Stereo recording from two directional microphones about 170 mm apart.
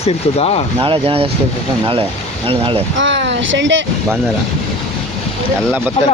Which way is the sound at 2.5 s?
35° right (ahead or behind).